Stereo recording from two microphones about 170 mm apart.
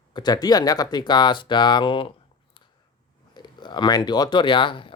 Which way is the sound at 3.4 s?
25° left (ahead or behind).